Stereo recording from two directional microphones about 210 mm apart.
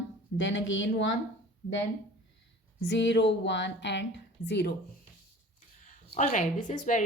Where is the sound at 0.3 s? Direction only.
60° left (ahead or behind).